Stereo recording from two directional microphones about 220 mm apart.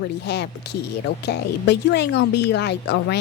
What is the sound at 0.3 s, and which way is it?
Speech, 50° left (ahead or behind).